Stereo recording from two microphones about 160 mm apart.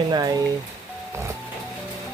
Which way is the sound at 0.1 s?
25° right (ahead or behind).